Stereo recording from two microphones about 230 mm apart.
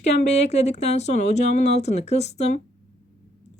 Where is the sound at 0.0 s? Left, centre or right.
Left.